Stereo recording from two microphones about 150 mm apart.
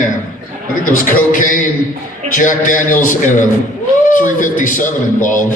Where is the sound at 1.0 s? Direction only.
65° left (ahead or behind).